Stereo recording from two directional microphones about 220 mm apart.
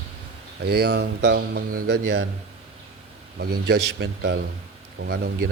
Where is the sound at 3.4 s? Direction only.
45° right (ahead or behind).